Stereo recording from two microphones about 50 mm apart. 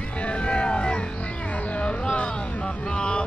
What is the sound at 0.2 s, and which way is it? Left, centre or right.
Music, left.